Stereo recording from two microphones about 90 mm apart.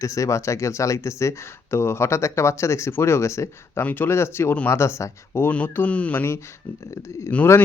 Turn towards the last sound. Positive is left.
turn(degrees=15)  # may be behind; listen again after turning